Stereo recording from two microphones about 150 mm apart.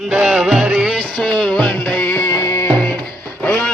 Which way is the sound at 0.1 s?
5° right (ahead or behind).